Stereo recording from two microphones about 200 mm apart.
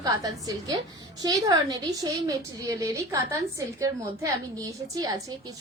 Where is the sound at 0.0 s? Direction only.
20° right (ahead or behind).